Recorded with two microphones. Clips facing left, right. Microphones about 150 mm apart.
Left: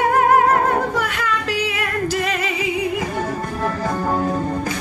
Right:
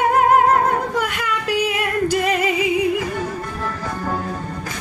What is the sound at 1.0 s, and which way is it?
Female singing, 15° right (ahead or behind).